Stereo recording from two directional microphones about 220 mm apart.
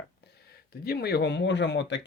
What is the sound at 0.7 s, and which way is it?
Speech, 45° left (ahead or behind).